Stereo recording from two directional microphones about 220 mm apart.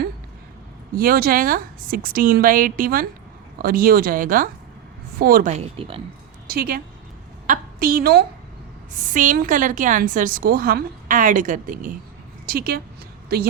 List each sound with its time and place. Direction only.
0.9 s a woman's voice: 40° right (ahead or behind); by 6.0 s 25° right (ahead or behind)
6.5 s a woman's voice: 45° right (ahead or behind)